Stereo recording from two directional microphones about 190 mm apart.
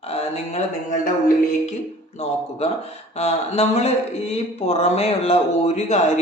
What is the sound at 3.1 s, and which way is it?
Speech, 35° left (ahead or behind).